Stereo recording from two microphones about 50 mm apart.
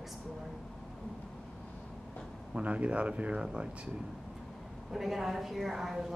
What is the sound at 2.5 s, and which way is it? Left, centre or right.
Speech, right.